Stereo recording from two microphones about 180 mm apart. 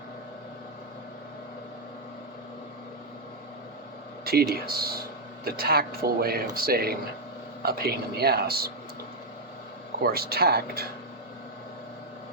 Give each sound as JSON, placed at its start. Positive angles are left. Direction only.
{"t": 4.5, "sound": "speech", "side_deg": -55}
{"t": 10.0, "sound": "speech", "side_deg": -60}